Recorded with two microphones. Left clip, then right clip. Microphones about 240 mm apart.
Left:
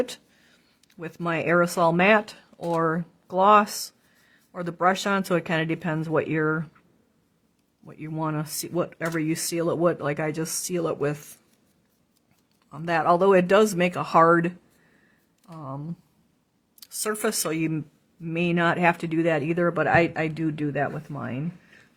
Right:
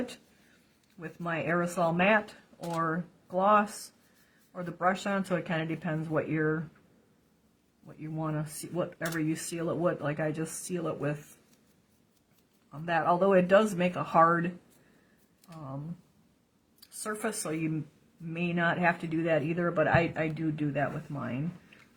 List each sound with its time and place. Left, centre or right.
0.9 s speech: left
7.9 s speech: left
12.8 s speech: left
15.5 s speech: left
16.8 s speech: left